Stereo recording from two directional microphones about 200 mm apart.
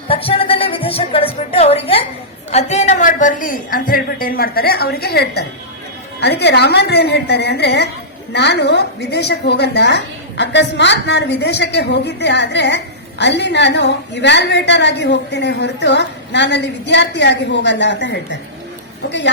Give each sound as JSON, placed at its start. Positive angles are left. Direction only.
{"t": 0.1, "sound": "a woman's voice", "side_deg": 30}